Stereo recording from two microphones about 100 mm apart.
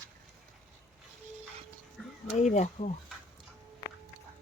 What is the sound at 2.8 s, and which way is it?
Speech, 90° left.